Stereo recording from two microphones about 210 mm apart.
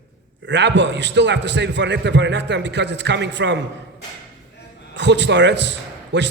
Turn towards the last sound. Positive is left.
turn(degrees=-55)  # may be behind; listen again after turning